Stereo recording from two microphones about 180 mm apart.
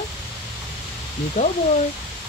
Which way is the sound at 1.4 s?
40° left (ahead or behind).